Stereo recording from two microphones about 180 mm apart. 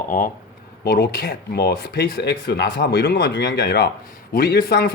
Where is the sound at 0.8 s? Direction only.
60° left (ahead or behind).